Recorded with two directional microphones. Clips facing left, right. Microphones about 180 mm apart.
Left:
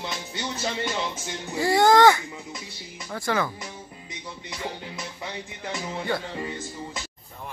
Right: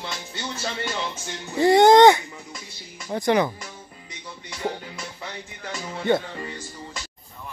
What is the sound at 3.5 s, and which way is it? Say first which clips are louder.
Music: left 2 dB; 20° left (ahead or behind).